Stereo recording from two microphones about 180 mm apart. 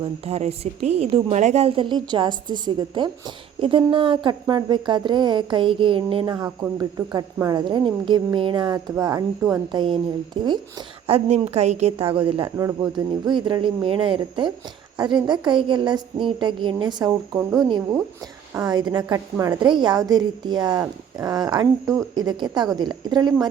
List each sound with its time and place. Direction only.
0.0 s a woman's voice: 35° right (ahead or behind)
12.5 s a woman's voice: 20° right (ahead or behind)